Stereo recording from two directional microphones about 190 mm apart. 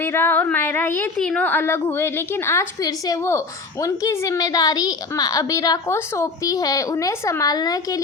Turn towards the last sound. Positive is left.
turn(degrees=20)  # may be behind; listen again after turning